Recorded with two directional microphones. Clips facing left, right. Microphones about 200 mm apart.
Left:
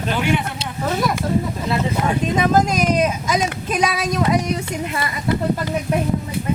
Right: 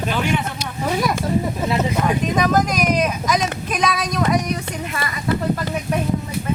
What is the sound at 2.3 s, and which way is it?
Speech, 25° left (ahead or behind).